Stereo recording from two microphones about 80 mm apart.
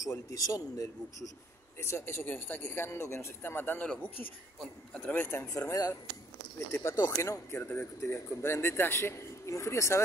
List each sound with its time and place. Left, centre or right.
0.0 s a man's voice: left
1.8 s speech: left
4.9 s speech: left
5.7 s a man's voice: left
6.8 s speech: left